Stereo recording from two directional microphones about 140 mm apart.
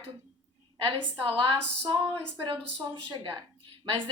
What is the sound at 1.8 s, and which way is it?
A woman's voice, 35° right (ahead or behind).